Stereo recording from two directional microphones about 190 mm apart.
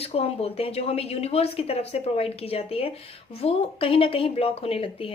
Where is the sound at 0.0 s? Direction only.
30° left (ahead or behind).